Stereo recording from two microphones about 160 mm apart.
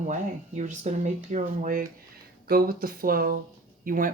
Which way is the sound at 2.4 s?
65° right (ahead or behind).